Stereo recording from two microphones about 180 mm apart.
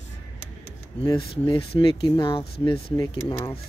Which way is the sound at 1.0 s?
30° left (ahead or behind).